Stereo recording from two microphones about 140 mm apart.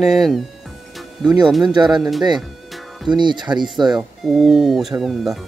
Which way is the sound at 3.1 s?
35° right (ahead or behind).